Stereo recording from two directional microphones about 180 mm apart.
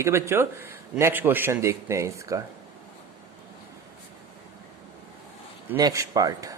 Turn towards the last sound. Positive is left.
turn(degrees=-20)  # may be behind; listen again after turning